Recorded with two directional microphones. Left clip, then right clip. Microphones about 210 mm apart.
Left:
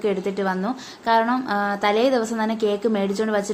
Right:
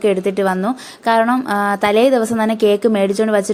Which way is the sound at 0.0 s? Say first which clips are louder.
Right 7 dB; 35° right (ahead or behind).